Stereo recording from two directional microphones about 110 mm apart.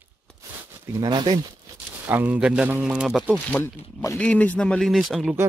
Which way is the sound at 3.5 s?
15° left (ahead or behind).